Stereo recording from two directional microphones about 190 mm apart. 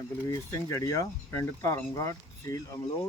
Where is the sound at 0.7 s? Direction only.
15° left (ahead or behind).